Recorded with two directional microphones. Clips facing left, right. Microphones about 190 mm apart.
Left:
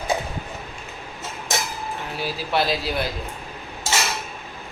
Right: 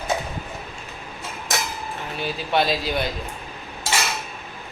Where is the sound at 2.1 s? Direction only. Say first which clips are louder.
Right 1 dB; 5° left (ahead or behind).